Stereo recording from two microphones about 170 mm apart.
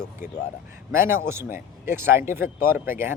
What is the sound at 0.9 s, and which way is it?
Speech, 15° right (ahead or behind).